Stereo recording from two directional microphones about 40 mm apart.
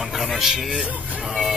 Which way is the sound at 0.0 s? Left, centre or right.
Centre.